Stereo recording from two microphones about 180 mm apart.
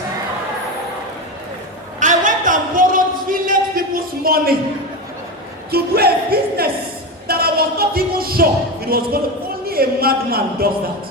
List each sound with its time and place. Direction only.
2.0 s a sound: 45° right (ahead or behind)
5.7 s music: 60° right (ahead or behind)
8.9 s speech: 55° right (ahead or behind)